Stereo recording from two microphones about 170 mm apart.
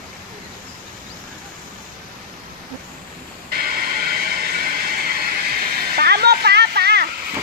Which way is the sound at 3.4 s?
60° right (ahead or behind).